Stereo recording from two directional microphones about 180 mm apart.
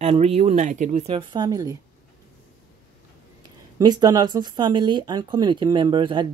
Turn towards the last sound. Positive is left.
turn(degrees=-25)  # may be behind; listen again after turning